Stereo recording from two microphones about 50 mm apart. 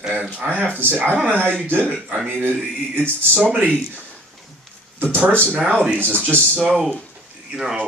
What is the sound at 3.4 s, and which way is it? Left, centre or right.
Speech, right.